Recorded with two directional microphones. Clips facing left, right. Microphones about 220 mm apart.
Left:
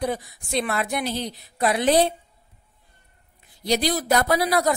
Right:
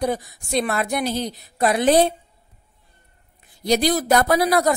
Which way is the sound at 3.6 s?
45° right (ahead or behind).